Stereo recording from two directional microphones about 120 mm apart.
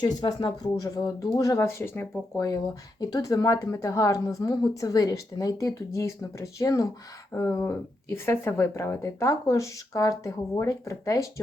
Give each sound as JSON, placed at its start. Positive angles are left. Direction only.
{"t": 0.0, "sound": "speech", "side_deg": 35}
{"t": 3.0, "sound": "speech", "side_deg": 30}